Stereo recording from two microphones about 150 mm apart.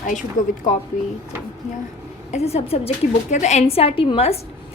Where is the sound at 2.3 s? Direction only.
45° left (ahead or behind).